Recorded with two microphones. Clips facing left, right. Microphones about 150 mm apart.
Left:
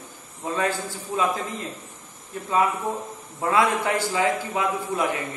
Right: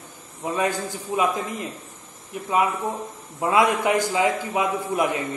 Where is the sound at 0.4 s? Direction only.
15° right (ahead or behind).